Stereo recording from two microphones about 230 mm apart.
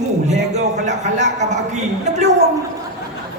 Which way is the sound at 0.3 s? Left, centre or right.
Right.